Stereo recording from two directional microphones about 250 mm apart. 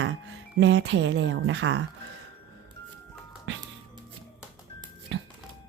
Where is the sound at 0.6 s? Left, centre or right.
Right.